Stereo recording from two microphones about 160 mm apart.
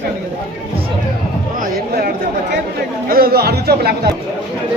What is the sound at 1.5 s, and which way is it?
Speech, 60° right (ahead or behind).